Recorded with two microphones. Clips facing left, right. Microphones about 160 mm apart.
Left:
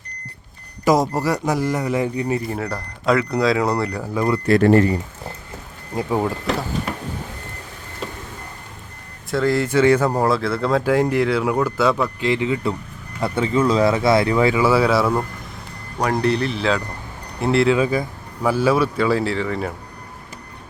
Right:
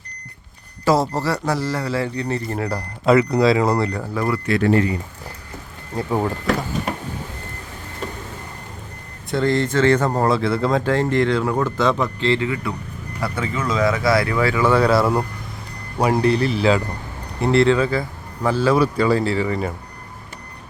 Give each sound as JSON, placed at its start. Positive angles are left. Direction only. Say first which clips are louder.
{"t": 0.9, "sound": "speech", "louder": "left 1 dB", "side_deg": 15}
{"t": 4.0, "sound": "speech", "louder": "left 2 dB", "side_deg": 15}
{"t": 4.4, "sound": "speech", "louder": "left 5 dB", "side_deg": 45}
{"t": 5.9, "sound": "speech", "louder": "left 1 dB", "side_deg": 15}
{"t": 9.3, "sound": "speech", "louder": "left 1 dB", "side_deg": 5}
{"t": 14.6, "sound": "speech", "louder": "even", "side_deg": 5}
{"t": 17.7, "sound": "speech", "louder": "left 1 dB", "side_deg": 15}